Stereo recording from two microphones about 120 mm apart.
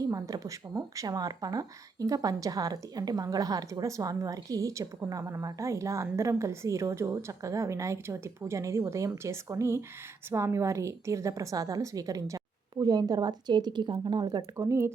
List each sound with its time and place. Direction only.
0.0 s a woman's voice: 30° right (ahead or behind)
14.3 s speech: 25° right (ahead or behind)